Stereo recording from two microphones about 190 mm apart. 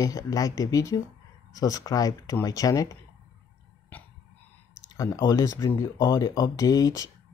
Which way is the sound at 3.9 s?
10° left (ahead or behind).